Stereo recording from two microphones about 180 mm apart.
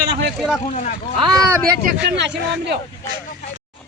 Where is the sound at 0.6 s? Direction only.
40° left (ahead or behind).